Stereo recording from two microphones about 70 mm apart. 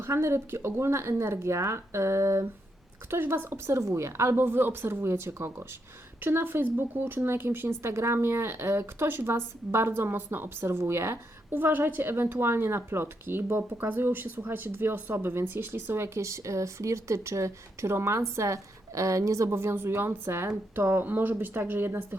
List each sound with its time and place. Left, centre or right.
0.0 s speech: right